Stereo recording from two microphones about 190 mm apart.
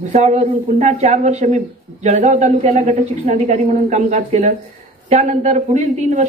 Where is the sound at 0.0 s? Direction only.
40° right (ahead or behind).